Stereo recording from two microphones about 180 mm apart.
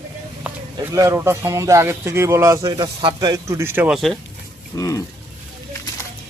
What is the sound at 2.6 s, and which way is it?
Speech, 25° right (ahead or behind).